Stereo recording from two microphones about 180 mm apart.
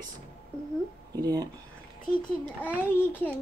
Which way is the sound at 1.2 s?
20° right (ahead or behind).